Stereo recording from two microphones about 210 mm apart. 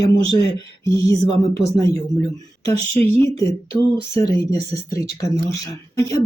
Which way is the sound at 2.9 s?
15° left (ahead or behind).